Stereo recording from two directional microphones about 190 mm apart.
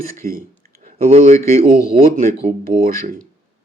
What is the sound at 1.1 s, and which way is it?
Speech, 35° right (ahead or behind).